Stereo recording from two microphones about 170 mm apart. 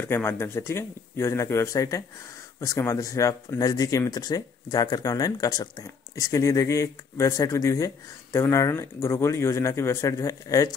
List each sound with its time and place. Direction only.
0.0 s speech: 15° left (ahead or behind)